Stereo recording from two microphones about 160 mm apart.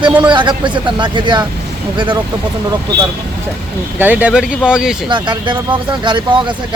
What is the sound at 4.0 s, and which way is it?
Speech, 10° right (ahead or behind).